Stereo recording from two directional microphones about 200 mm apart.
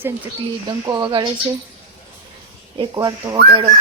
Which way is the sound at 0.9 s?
20° right (ahead or behind).